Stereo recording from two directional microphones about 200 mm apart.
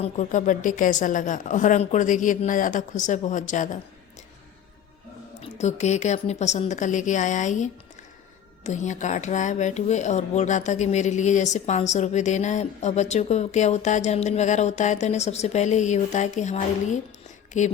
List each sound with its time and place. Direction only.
0.0 s speech: 40° left (ahead or behind)
5.4 s speech: 35° left (ahead or behind)